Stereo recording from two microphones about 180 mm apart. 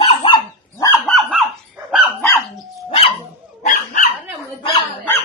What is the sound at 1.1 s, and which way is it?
Dog, centre (ahead or behind).